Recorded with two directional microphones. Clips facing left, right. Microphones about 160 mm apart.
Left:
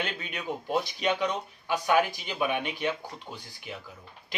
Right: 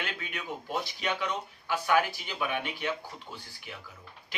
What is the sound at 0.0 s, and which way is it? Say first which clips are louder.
Speech: left 4 dB; 20° left (ahead or behind).